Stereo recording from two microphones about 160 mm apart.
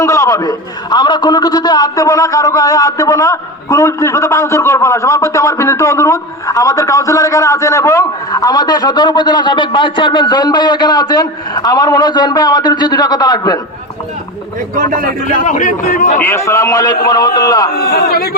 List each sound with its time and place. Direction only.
0.0 s a man's voice: 20° left (ahead or behind)
14.8 s speech: 60° right (ahead or behind)
15.4 s a man's voice: 55° left (ahead or behind)
16.2 s a man's voice: 15° left (ahead or behind)
17.7 s a man's voice: 75° left (ahead or behind)